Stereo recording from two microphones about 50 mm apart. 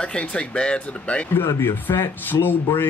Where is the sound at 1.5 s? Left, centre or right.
Left.